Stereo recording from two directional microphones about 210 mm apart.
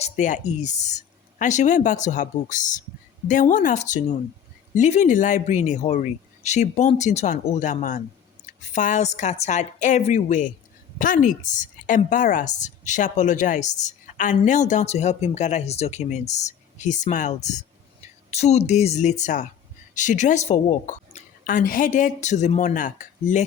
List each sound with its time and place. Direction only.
0.0 s a woman's voice: 35° left (ahead or behind)